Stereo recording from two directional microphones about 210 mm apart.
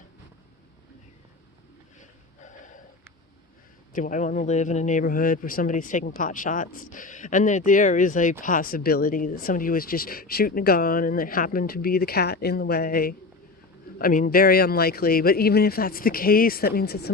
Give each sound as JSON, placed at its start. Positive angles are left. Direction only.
{"t": 3.9, "sound": "speech", "side_deg": 40}